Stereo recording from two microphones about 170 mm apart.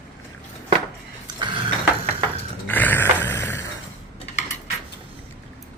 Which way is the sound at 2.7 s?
10° left (ahead or behind).